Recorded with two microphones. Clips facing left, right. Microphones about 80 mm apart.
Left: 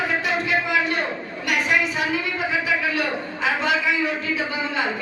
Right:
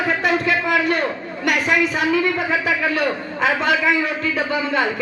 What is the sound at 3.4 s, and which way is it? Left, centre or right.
A man's voice, right.